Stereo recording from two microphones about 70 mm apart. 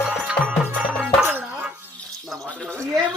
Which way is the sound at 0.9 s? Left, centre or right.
Right.